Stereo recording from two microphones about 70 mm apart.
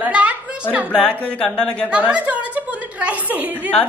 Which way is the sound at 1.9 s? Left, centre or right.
Centre.